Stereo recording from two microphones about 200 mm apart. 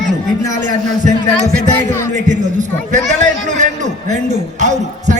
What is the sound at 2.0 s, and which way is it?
Speech, 35° right (ahead or behind).